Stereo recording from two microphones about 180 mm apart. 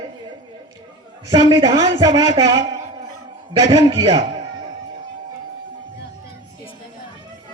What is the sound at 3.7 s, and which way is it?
Speech, 25° right (ahead or behind).